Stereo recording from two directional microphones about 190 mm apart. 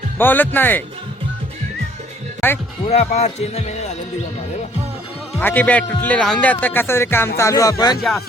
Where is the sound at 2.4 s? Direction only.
10° left (ahead or behind).